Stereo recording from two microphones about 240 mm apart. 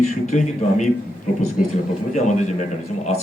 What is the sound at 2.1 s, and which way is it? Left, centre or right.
Speech, left.